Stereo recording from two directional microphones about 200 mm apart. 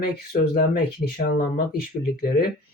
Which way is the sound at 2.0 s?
50° left (ahead or behind).